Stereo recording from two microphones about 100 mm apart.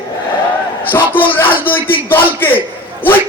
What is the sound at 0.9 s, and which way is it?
Music, 20° left (ahead or behind).